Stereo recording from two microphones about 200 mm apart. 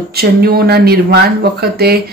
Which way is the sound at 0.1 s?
50° right (ahead or behind).